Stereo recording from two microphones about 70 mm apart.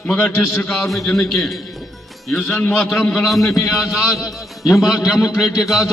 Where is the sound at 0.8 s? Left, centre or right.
Centre.